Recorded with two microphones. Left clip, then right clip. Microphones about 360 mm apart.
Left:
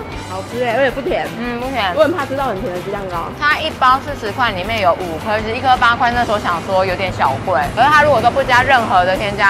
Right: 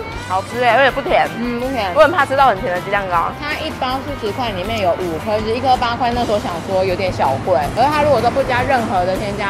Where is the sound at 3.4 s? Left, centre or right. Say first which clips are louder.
Left 8 dB; left.